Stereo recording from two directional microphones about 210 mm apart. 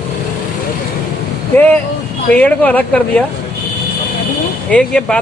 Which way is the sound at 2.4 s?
5° left (ahead or behind).